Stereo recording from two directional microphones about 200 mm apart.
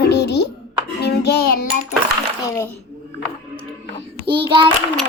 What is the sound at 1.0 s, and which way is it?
Child singing, 55° left (ahead or behind).